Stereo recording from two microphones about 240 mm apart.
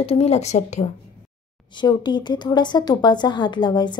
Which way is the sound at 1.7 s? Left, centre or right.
Centre.